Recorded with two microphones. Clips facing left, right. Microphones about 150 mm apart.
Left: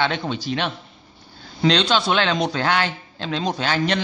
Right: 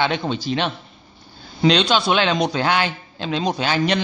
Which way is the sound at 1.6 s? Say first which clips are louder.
Right 2 dB; 10° right (ahead or behind).